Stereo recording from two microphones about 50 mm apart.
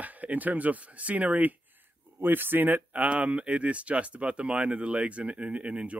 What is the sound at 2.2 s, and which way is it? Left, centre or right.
Speech, right.